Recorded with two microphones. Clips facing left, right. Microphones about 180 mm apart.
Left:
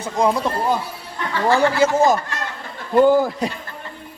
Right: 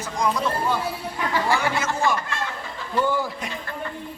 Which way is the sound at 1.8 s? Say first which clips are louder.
Left 12 dB; 30° left (ahead or behind).